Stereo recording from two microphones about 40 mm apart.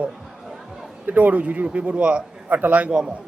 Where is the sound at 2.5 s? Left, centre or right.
Right.